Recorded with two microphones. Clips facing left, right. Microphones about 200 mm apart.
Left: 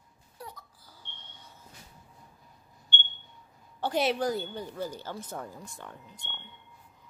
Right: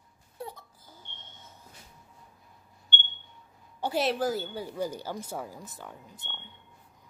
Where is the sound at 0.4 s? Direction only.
25° right (ahead or behind).